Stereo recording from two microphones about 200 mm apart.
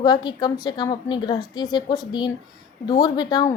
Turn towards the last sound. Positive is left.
turn(degrees=20)  # may be behind; listen again after turning